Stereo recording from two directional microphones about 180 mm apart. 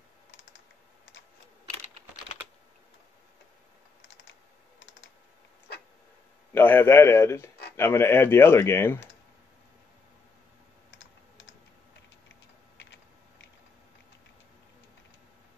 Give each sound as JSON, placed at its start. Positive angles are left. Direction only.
{"t": 0.3, "sound": "computer keyboard", "side_deg": 90}
{"t": 4.2, "sound": "computer keyboard", "side_deg": 90}
{"t": 6.5, "sound": "speech", "side_deg": 10}
{"t": 10.9, "sound": "computer keyboard", "side_deg": 90}
{"t": 12.7, "sound": "typing", "side_deg": 85}